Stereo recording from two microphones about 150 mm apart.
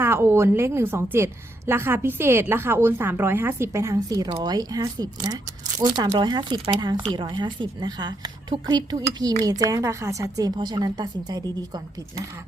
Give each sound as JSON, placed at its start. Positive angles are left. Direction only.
{"t": 0.0, "sound": "a woman's voice", "side_deg": -15}